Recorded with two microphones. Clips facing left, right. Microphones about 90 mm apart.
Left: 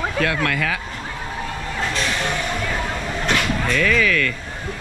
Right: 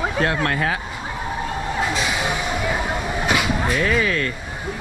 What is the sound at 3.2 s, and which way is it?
Vehicle, 10° right (ahead or behind).